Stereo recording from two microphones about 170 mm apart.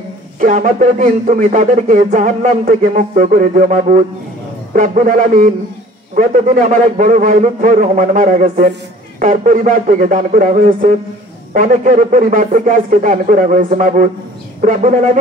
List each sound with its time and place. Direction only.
0.4 s speech: 50° right (ahead or behind)